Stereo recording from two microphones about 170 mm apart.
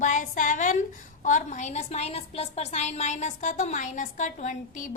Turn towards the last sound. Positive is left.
turn(degrees=45)  # may be behind; listen again after turning